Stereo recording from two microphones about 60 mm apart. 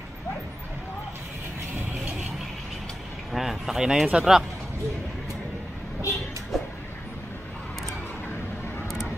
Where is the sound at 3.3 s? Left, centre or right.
Centre.